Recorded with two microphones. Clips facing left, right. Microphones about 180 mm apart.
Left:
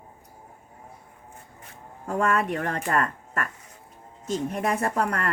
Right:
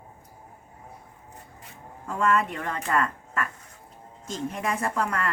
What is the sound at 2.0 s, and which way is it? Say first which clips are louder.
Speech: even; 45° left (ahead or behind).